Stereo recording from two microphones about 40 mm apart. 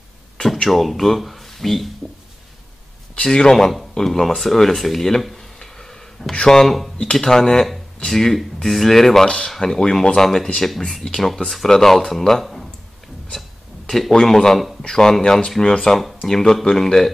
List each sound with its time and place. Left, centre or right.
0.7 s speech: centre
3.2 s speech: centre
4.3 s a sound: centre
6.4 s speech: centre
13.8 s speech: centre